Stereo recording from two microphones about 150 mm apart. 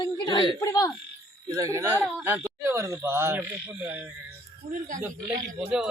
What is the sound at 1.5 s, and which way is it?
Speech, 20° right (ahead or behind).